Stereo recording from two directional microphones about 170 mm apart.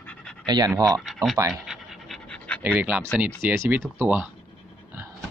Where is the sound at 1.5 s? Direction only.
Centre (ahead or behind).